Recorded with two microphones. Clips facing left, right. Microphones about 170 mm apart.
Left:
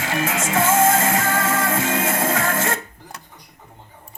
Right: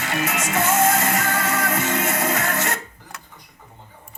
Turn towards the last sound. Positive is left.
turn(degrees=25)  # may be behind; listen again after turning